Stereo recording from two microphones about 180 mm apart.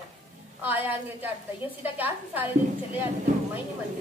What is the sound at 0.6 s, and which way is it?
A woman's voice, 10° right (ahead or behind).